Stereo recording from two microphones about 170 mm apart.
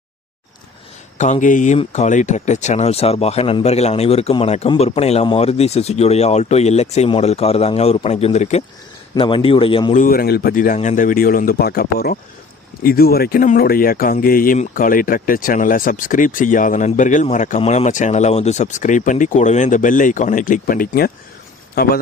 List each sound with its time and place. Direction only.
1.2 s speech: 45° left (ahead or behind)
9.1 s speech: 30° left (ahead or behind)
9.9 s speech: 55° left (ahead or behind); by 21.9 s 70° left (ahead or behind)